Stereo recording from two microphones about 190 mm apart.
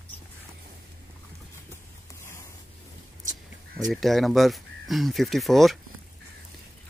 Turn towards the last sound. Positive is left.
turn(degrees=0)  # may be behind; listen again after turning